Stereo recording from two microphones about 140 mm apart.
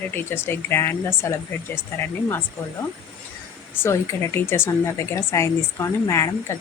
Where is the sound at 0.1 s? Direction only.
15° left (ahead or behind).